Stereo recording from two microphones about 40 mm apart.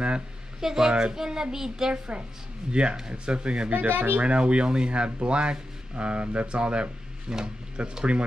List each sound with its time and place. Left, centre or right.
0.6 s a child's voice: centre
2.7 s speech: right
3.7 s speech: right
4.2 s speech: right